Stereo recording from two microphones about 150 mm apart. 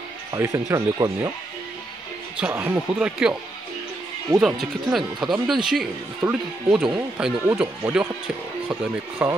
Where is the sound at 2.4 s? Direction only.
15° right (ahead or behind).